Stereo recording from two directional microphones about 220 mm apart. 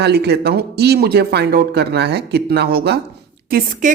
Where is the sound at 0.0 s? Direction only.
50° right (ahead or behind).